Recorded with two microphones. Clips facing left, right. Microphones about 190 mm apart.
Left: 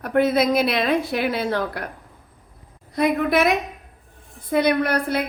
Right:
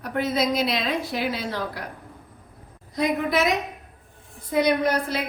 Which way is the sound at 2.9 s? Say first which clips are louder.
Left 4 dB; 60° left (ahead or behind).